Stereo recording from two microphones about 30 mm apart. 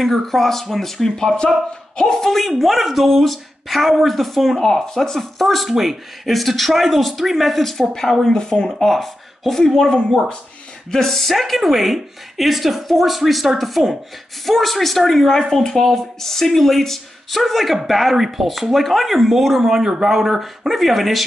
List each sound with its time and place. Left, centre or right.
0.0 s speech: centre
2.6 s speech: centre
4.6 s speech: centre
5.4 s speech: centre
8.3 s speech: left
8.6 s speech: centre
20.1 s speech: centre